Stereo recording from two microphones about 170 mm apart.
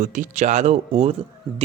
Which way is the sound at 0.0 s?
50° right (ahead or behind).